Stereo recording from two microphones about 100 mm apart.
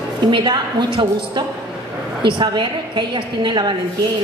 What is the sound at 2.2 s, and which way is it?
A woman's voice, 50° right (ahead or behind).